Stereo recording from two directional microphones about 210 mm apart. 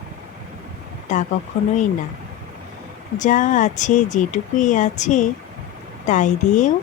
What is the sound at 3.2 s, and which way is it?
Speech, 35° left (ahead or behind).